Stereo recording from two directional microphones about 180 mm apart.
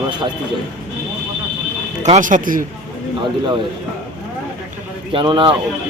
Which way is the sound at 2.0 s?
45° right (ahead or behind).